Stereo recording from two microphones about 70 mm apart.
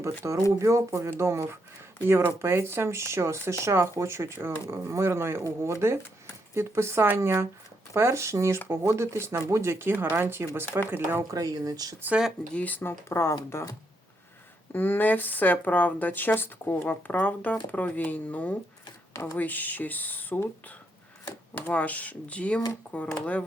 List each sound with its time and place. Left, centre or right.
0.2 s speech: right
11.2 s speech: right
12.5 s speech: left
12.9 s speech: left
14.7 s speech: left
21.7 s speech: centre